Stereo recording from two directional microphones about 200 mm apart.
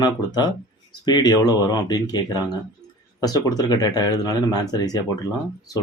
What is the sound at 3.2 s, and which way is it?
Speech, 20° left (ahead or behind).